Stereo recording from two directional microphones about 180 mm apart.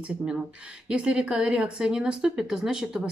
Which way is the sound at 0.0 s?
5° right (ahead or behind).